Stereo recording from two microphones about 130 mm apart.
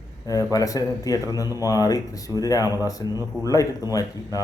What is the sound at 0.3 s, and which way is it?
Speech, 25° left (ahead or behind).